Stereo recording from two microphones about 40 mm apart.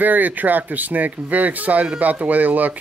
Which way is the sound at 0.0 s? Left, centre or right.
Right.